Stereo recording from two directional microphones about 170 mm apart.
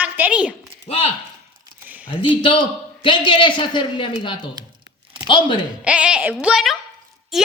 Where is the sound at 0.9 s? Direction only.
35° left (ahead or behind).